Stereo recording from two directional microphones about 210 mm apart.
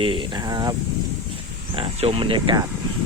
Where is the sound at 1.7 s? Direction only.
25° right (ahead or behind).